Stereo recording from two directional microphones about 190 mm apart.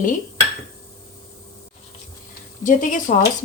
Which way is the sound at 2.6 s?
45° left (ahead or behind).